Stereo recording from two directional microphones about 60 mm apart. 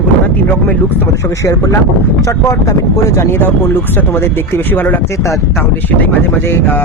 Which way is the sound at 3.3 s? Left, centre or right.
Left.